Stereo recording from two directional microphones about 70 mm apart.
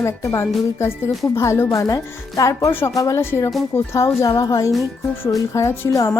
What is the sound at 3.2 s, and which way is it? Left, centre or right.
Speech, left.